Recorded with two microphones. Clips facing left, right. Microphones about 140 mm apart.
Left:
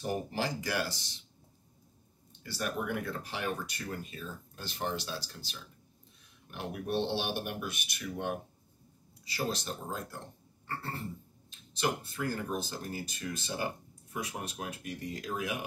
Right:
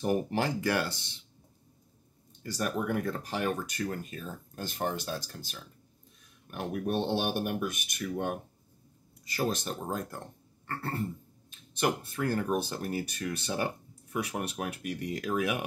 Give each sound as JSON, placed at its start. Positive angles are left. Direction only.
{"t": 0.0, "sound": "speech", "side_deg": -60}
{"t": 2.4, "sound": "speech", "side_deg": -45}
{"t": 11.7, "sound": "speech", "side_deg": -55}